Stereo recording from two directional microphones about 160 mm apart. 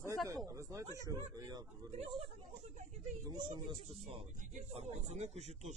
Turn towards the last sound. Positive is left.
turn(degrees=-45)  # may be behind; listen again after turning